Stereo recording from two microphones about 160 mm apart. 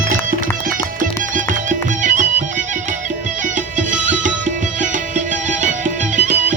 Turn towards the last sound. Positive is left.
turn(degrees=-50)  # may be behind; listen again after turning